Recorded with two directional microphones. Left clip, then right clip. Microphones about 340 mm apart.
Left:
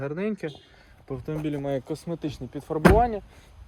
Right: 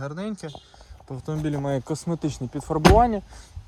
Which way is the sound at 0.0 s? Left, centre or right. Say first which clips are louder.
Left 3 dB; centre.